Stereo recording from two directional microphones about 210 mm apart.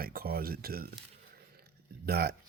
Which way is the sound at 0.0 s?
45° right (ahead or behind).